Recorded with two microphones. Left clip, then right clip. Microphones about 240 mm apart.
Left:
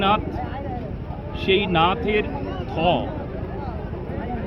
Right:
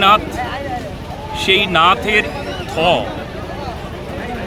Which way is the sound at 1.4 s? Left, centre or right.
Centre.